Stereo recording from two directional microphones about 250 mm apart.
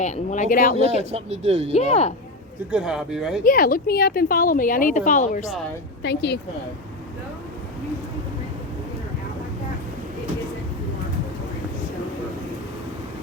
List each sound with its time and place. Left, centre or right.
0.0 s speech: left
0.8 s speech: right
1.7 s speech: left
2.7 s speech: centre
3.4 s speech: left
6.0 s speech: left